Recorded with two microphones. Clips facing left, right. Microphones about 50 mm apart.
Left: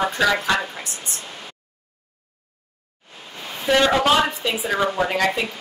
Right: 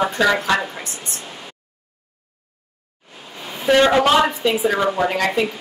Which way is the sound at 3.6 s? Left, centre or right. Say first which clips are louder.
Right 3 dB; centre.